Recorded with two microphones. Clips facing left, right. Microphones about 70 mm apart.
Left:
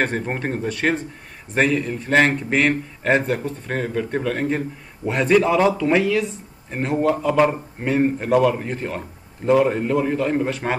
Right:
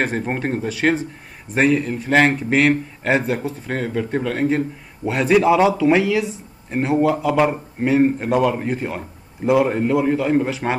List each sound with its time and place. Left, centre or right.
0.0 s speech: centre